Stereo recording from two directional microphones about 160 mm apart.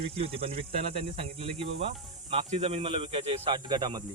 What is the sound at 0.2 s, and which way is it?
Speech, 35° right (ahead or behind).